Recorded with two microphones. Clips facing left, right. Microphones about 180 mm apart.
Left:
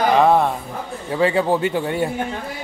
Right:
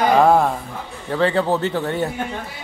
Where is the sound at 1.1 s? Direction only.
10° left (ahead or behind).